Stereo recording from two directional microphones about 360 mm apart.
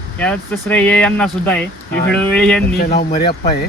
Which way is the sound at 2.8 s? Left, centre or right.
Left.